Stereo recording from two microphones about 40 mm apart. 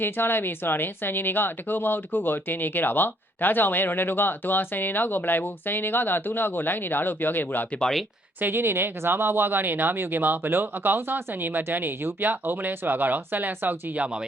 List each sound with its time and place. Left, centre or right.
0.0 s speech: left
8.4 s speech: right
13.9 s speech: right